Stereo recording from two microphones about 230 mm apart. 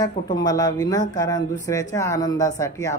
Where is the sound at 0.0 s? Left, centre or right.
Centre.